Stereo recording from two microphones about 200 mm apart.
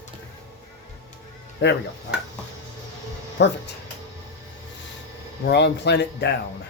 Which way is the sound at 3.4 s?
60° left (ahead or behind).